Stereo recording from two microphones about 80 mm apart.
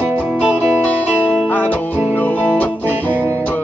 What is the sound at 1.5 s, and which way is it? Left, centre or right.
Music, left.